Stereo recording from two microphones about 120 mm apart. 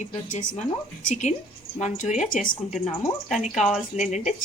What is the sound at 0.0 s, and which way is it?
A woman's voice, 90° left.